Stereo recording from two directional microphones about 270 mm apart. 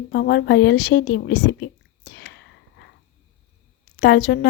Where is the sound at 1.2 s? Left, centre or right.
Left.